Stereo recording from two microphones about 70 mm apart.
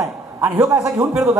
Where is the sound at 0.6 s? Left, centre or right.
Right.